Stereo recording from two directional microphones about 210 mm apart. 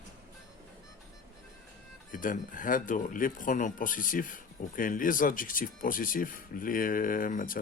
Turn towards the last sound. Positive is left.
turn(degrees=40)  # may be behind; listen again after turning